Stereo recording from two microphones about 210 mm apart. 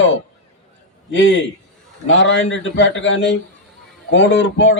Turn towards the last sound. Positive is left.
turn(degrees=60)  # may be behind; listen again after turning